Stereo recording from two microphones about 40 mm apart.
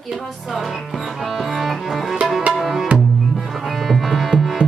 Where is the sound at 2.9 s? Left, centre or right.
Centre.